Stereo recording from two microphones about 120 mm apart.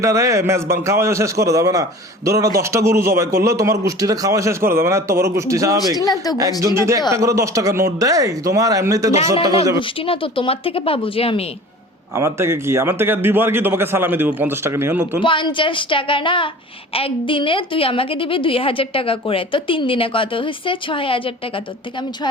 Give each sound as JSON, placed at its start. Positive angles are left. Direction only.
{"t": 0.0, "sound": "a man's voice", "side_deg": -25}
{"t": 6.0, "sound": "speech", "side_deg": 30}
{"t": 6.6, "sound": "a man's voice", "side_deg": -25}
{"t": 9.7, "sound": "a woman's voice", "side_deg": 45}
{"t": 12.1, "sound": "a man's voice", "side_deg": -20}
{"t": 15.2, "sound": "a woman's voice", "side_deg": 40}